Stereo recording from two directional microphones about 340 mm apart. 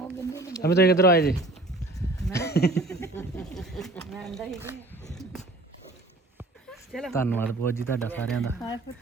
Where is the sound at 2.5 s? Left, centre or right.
Left.